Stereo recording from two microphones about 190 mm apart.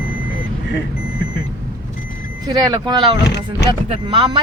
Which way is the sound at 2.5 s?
20° right (ahead or behind).